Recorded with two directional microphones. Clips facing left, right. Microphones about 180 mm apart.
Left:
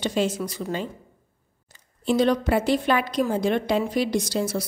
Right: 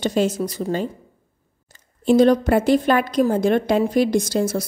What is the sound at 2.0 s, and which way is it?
A woman's voice, 45° right (ahead or behind).